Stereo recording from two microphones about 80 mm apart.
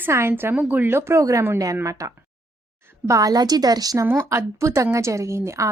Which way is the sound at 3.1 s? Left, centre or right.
Right.